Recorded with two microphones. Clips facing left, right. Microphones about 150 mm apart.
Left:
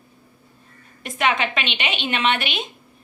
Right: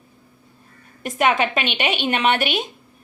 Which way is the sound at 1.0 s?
45° right (ahead or behind).